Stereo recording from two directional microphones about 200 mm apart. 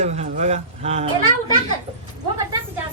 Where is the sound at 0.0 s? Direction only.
35° right (ahead or behind).